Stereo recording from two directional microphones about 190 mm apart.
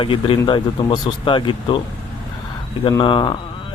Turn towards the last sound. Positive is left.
turn(degrees=25)  # may be behind; listen again after turning